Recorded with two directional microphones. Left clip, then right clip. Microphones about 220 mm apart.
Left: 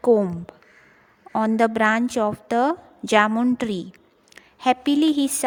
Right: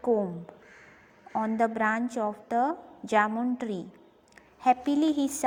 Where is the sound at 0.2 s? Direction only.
45° left (ahead or behind).